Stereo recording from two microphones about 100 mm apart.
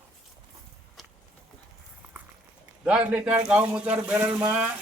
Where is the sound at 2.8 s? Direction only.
10° right (ahead or behind).